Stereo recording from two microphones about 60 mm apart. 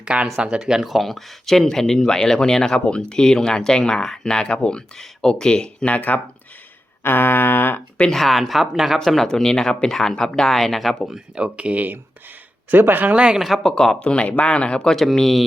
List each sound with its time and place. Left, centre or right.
0.0 s speech: centre
0.6 s speech: centre; by 6.1 s left
7.0 s a sound: left
8.1 s speech: centre
9.0 s speech: centre
11.3 s speech: right
13.1 s speech: centre
13.4 s speech: centre
14.0 s speech: centre
14.9 s speech: centre